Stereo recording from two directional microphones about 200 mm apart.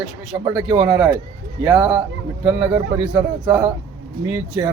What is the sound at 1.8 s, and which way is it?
Speech, 25° right (ahead or behind).